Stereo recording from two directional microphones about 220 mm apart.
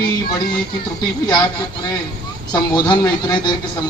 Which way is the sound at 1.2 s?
20° left (ahead or behind).